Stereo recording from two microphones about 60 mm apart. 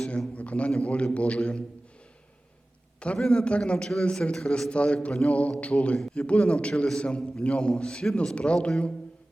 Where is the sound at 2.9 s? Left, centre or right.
Centre.